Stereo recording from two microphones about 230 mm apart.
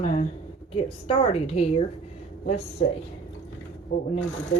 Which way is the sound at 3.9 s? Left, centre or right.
Left.